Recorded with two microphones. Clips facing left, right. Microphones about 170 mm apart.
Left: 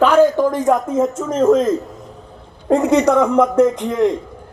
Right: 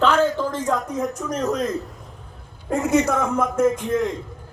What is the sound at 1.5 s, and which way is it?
Speech, 90° left.